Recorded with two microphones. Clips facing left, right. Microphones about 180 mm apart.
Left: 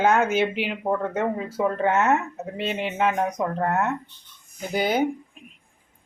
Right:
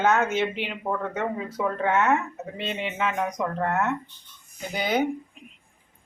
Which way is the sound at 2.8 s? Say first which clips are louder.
Left 4 dB; 40° left (ahead or behind).